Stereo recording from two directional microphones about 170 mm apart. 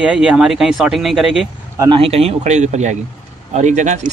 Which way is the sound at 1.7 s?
30° right (ahead or behind).